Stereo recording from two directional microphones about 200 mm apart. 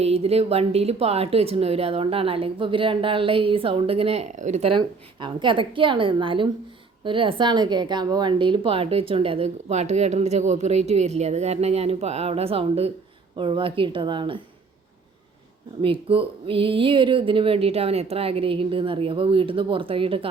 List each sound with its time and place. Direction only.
0.0 s a woman's voice: 30° right (ahead or behind)
15.8 s speech: 25° right (ahead or behind)